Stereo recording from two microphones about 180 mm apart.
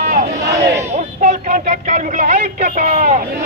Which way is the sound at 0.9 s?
40° right (ahead or behind).